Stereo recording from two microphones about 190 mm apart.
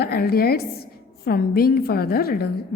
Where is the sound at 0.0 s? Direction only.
55° left (ahead or behind).